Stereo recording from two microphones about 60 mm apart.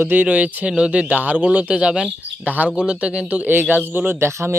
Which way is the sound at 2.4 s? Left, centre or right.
Right.